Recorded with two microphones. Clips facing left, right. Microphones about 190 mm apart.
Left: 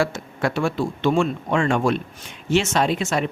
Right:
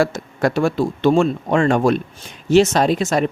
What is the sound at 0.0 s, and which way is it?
Speech, 40° right (ahead or behind).